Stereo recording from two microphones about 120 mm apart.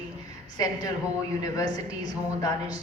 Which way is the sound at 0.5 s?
30° left (ahead or behind).